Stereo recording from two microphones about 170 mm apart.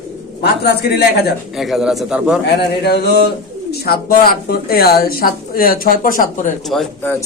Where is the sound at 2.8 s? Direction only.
70° left (ahead or behind); by 6.5 s 50° left (ahead or behind).